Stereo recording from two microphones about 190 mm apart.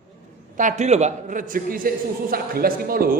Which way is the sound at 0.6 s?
35° right (ahead or behind).